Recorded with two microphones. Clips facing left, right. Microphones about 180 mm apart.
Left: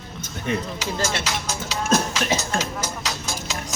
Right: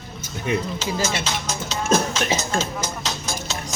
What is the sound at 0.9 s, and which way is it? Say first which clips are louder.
Speech: even; 5° right (ahead or behind).